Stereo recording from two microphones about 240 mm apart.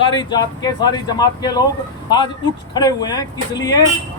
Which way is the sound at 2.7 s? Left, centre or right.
Centre.